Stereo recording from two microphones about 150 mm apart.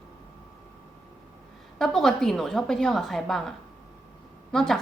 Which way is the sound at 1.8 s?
5° left (ahead or behind).